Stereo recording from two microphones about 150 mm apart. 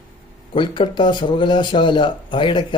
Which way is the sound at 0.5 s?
35° left (ahead or behind).